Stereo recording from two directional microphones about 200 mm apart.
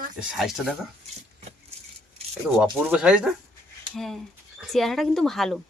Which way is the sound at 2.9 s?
5° right (ahead or behind).